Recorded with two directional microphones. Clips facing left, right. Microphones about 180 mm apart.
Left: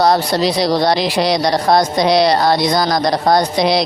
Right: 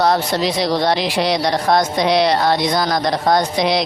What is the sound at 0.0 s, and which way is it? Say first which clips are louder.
Speech: left 3 dB; 35° left (ahead or behind).